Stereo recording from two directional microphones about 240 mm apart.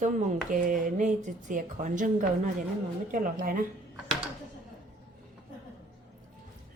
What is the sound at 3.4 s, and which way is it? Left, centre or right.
Speech, right.